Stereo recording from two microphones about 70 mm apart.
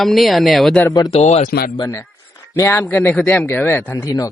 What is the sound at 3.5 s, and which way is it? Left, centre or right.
Speech, left.